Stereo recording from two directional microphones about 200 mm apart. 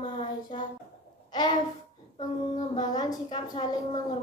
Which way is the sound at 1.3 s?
20° left (ahead or behind).